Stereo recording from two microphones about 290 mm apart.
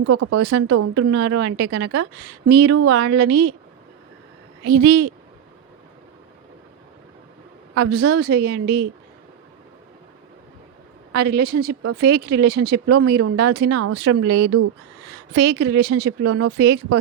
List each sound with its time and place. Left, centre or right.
0.0 s speech: right
1.1 s a woman's voice: right
4.9 s a woman's voice: right
7.8 s a woman's voice: right
11.1 s a woman's voice: right
13.7 s speech: right
14.0 s a woman's voice: right
16.2 s speech: right
16.5 s a woman's voice: right